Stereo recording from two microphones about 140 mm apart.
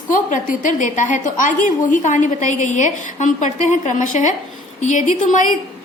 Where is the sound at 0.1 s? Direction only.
70° left (ahead or behind).